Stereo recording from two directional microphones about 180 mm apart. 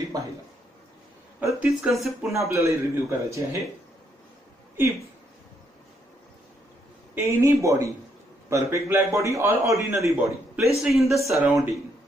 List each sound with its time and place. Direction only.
1.4 s speech: 5° right (ahead or behind)
2.5 s a man's voice: 15° right (ahead or behind)
7.2 s a man's voice: 15° right (ahead or behind)
10.0 s a man's voice: centre (ahead or behind)